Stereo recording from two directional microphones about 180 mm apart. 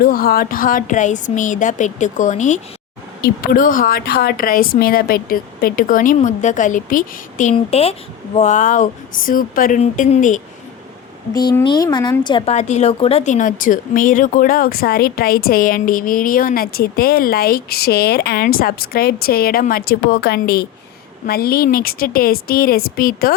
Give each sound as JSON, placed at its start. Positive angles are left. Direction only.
{"t": 0.0, "sound": "speech", "side_deg": 55}
{"t": 3.2, "sound": "speech", "side_deg": 55}
{"t": 7.5, "sound": "a woman's voice", "side_deg": 35}
{"t": 11.6, "sound": "speech", "side_deg": 25}
{"t": 12.5, "sound": "speech", "side_deg": 40}